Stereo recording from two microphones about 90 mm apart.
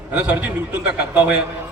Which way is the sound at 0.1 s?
15° right (ahead or behind).